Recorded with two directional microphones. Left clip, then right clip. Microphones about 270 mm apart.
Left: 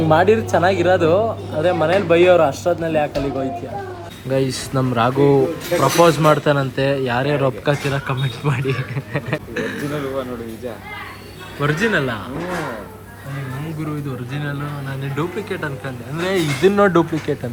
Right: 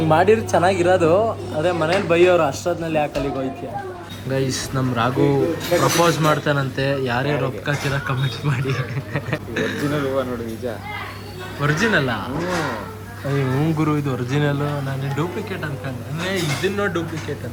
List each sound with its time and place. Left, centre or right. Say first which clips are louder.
0.1 s speech: left 1 dB; centre
11.6 s speech: left 1 dB; centre
13.7 s speech: right 6 dB; centre